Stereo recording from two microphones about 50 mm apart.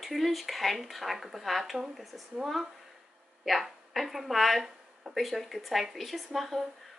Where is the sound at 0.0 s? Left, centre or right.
Centre.